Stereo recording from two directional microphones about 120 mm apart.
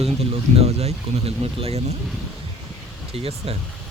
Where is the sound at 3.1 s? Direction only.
50° right (ahead or behind).